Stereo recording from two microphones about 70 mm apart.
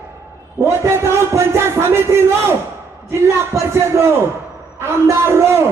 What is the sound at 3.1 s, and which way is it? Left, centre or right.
A man's voice, right.